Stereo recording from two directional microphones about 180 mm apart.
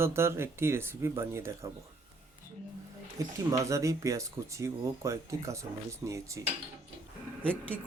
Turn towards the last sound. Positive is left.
turn(degrees=5)  # may be behind; listen again after turning